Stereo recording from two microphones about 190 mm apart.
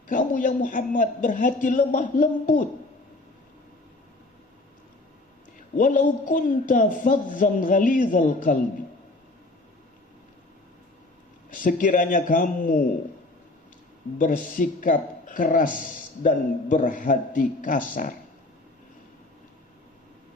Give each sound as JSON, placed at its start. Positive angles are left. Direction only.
{"t": 0.1, "sound": "speech", "side_deg": 40}
{"t": 5.7, "sound": "speech", "side_deg": 45}
{"t": 11.5, "sound": "speech", "side_deg": 45}
{"t": 14.2, "sound": "speech", "side_deg": 45}